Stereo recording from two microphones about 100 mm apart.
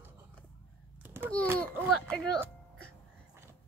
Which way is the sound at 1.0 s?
20° right (ahead or behind).